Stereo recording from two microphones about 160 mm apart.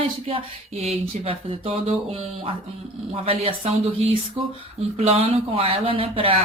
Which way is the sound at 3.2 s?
40° right (ahead or behind).